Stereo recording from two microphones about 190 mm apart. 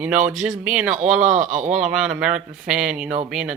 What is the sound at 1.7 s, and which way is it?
Speech, 5° right (ahead or behind).